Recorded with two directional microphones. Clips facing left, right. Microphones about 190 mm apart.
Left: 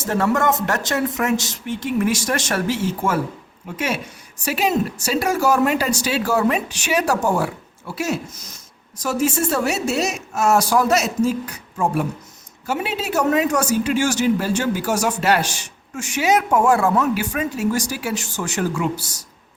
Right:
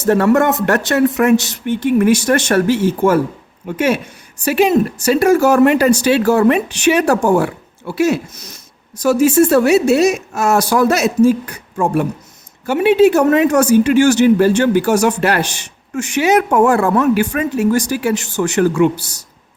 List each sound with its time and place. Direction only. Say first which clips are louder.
0.0 s speech: right 7 dB; 65° right (ahead or behind)
4.4 s speech: right 7 dB; 55° right (ahead or behind)